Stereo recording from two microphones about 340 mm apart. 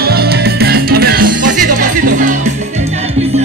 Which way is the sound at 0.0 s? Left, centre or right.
Right.